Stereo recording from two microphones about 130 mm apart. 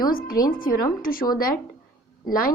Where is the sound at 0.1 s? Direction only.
90° left.